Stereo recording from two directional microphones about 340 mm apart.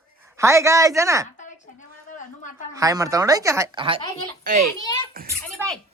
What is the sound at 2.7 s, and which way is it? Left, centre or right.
Speech, centre.